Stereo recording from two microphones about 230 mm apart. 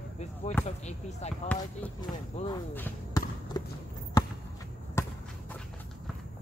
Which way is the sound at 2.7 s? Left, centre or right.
Centre.